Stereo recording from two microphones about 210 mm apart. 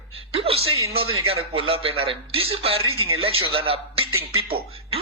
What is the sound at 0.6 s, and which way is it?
Speech, 80° right.